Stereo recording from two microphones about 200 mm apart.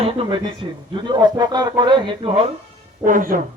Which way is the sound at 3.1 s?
45° right (ahead or behind).